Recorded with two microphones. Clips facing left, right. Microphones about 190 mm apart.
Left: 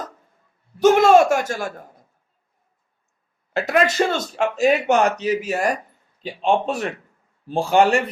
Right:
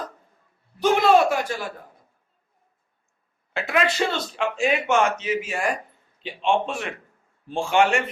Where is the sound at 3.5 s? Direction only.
40° left (ahead or behind).